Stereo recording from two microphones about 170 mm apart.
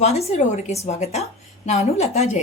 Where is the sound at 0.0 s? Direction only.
40° left (ahead or behind).